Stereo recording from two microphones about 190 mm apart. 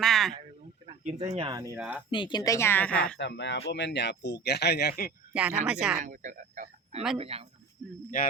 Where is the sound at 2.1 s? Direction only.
25° left (ahead or behind); by 3.1 s 5° left (ahead or behind).